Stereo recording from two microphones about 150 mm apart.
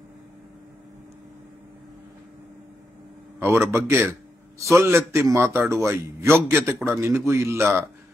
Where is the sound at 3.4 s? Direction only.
15° right (ahead or behind).